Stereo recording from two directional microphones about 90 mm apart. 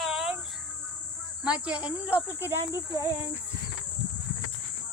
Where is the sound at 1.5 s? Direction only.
10° right (ahead or behind); by 3.1 s 30° right (ahead or behind).